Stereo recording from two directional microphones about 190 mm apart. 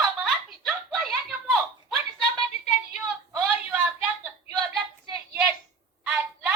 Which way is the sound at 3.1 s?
Centre (ahead or behind).